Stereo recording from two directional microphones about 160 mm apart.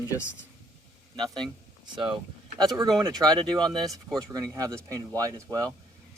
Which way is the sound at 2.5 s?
25° right (ahead or behind).